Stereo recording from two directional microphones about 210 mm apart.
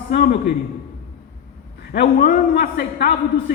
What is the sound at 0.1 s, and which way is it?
Speech, 50° left (ahead or behind).